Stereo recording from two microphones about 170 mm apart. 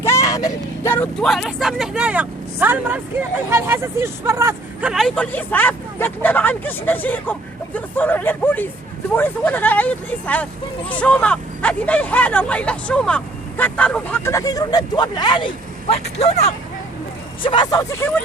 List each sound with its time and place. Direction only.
0.0 s speech: 15° left (ahead or behind); by 4.9 s 15° right (ahead or behind)
4.9 s speech: centre (ahead or behind); by 16.0 s 30° left (ahead or behind)
16.1 s speech: 40° left (ahead or behind)
17.4 s speech: 25° left (ahead or behind)